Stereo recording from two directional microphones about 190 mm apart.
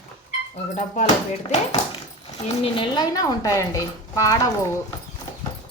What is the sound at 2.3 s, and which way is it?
Speech, 25° left (ahead or behind).